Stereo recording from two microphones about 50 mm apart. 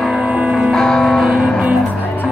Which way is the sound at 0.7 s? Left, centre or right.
Centre.